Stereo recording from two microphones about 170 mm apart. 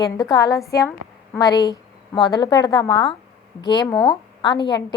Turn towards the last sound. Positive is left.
turn(degrees=25)  # may be behind; listen again after turning